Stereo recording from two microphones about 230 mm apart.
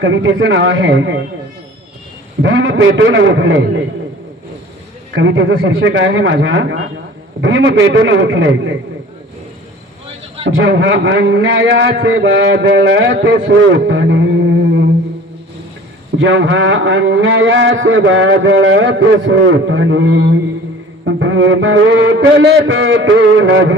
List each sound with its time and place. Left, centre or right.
0.0 s speech: right
2.4 s a man's voice: right
5.1 s a man's voice: right
10.4 s a man's voice: right
16.1 s a man's voice: right